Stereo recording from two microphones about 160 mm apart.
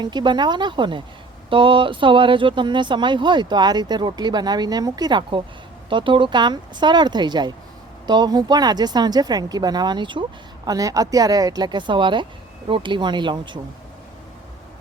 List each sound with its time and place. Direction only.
0.0 s speech: 30° right (ahead or behind)